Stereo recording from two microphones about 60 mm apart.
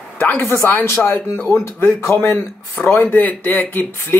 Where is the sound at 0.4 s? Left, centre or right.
Left.